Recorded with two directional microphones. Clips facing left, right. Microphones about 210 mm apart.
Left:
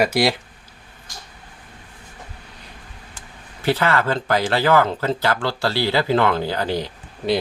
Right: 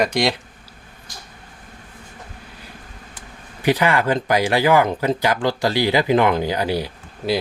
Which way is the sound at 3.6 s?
15° right (ahead or behind).